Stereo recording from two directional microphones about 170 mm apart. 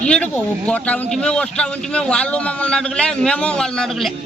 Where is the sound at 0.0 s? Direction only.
5° left (ahead or behind).